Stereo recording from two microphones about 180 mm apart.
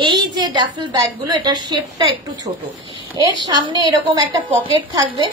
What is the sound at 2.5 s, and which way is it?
Speech, 35° right (ahead or behind).